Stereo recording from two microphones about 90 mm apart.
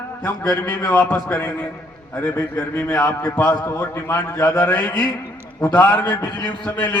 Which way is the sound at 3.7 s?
25° left (ahead or behind).